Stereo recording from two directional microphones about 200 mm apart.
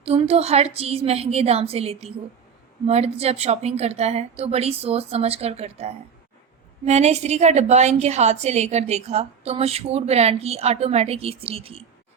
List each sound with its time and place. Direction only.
0.0 s a woman's voice: 30° right (ahead or behind)